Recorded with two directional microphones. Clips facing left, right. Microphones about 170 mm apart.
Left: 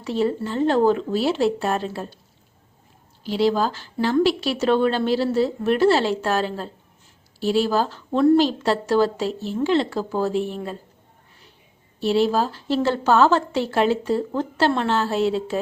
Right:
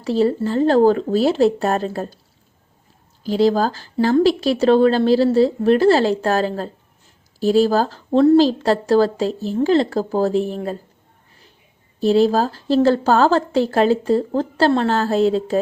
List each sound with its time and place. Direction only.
0.0 s a woman's voice: 35° right (ahead or behind)
3.2 s a woman's voice: 40° right (ahead or behind)
12.0 s a woman's voice: 40° right (ahead or behind)